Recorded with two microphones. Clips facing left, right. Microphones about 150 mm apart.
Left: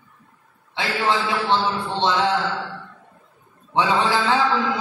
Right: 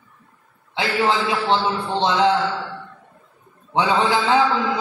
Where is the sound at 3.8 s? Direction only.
20° right (ahead or behind).